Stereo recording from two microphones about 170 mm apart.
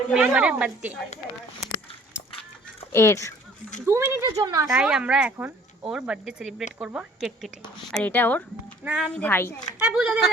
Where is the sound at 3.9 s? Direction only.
15° right (ahead or behind).